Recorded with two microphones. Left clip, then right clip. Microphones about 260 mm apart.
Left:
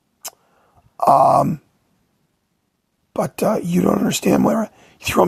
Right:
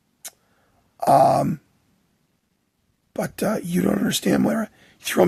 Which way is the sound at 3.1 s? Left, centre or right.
Centre.